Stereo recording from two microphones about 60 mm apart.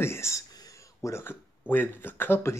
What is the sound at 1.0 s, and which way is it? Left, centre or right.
Speech, left.